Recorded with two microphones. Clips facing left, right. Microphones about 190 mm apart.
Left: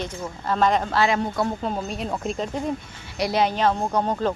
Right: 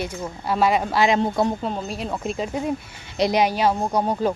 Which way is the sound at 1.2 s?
25° right (ahead or behind).